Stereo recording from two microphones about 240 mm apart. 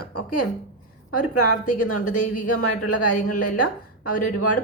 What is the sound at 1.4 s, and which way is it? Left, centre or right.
Speech, left.